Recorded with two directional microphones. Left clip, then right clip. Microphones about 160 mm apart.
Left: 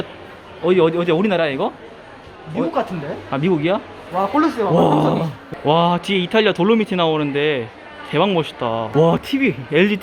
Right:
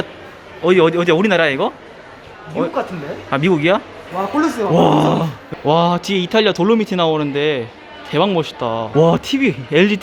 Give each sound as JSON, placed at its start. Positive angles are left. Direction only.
{"t": 0.6, "sound": "speech", "side_deg": 0}
{"t": 3.2, "sound": "speech", "side_deg": -5}
{"t": 4.4, "sound": "speech", "side_deg": -30}
{"t": 4.7, "sound": "speech", "side_deg": 0}